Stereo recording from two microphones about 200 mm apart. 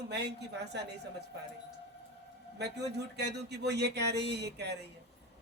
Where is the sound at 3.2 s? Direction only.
55° right (ahead or behind).